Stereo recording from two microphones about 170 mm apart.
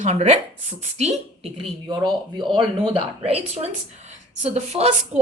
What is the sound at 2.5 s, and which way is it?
A woman's voice, 30° right (ahead or behind).